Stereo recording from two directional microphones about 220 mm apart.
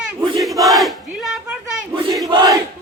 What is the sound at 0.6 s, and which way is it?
Battle cry, centre (ahead or behind).